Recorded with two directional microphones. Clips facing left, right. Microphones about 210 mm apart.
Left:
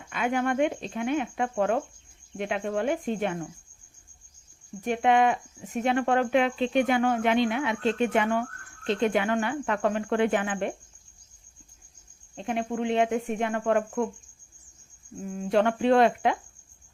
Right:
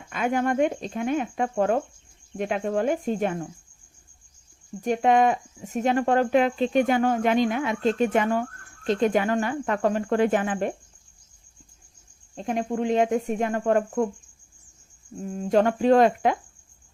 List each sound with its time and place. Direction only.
0.1 s speech: 40° right (ahead or behind)
4.8 s speech: 40° right (ahead or behind)
12.4 s speech: 40° right (ahead or behind)
15.3 s speech: 40° right (ahead or behind)